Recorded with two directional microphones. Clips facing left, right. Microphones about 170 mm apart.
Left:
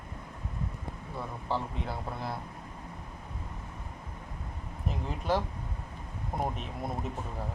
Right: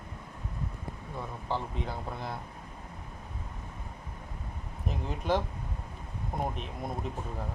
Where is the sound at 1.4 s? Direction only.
5° left (ahead or behind).